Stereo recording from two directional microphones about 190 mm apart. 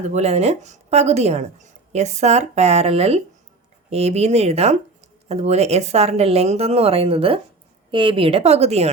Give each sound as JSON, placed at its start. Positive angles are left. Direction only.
{"t": 0.0, "sound": "a woman's voice", "side_deg": -35}